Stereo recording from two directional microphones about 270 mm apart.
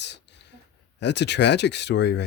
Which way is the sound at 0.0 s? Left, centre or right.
Left.